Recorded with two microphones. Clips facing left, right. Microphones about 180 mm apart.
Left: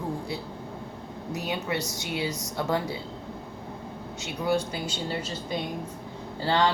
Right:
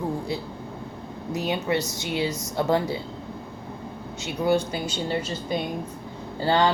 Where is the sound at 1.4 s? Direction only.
25° right (ahead or behind).